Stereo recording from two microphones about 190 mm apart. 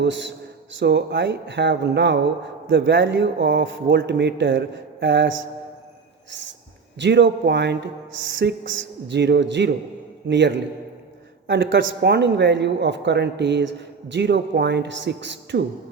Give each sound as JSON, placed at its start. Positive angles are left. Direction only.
{"t": 0.0, "sound": "speech", "side_deg": -70}
{"t": 7.0, "sound": "speech", "side_deg": -65}
{"t": 8.4, "sound": "speech", "side_deg": -75}